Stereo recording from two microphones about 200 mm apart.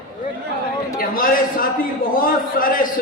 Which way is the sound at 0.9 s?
45° left (ahead or behind).